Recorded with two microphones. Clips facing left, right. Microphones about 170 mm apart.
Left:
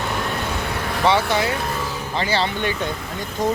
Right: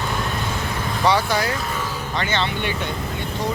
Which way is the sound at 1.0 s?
25° left (ahead or behind).